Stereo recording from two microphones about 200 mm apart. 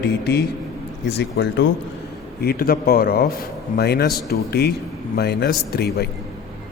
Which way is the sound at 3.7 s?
55° left (ahead or behind).